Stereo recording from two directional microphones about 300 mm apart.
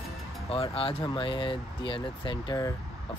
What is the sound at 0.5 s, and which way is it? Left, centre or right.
Speech, centre.